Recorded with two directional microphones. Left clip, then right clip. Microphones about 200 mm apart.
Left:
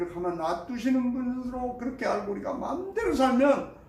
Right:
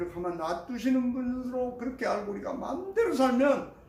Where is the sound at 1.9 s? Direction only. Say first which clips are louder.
Left 2 dB; 20° right (ahead or behind).